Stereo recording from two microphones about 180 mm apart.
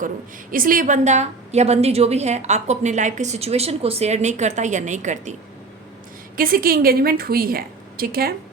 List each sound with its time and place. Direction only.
0.5 s a woman's voice: 50° right (ahead or behind)
6.3 s a woman's voice: 55° right (ahead or behind)